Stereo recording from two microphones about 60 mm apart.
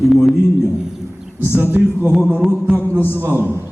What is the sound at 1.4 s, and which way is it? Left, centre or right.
Speech, right.